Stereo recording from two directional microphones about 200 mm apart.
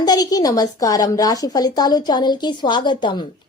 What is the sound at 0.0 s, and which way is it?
A woman's voice, 20° left (ahead or behind).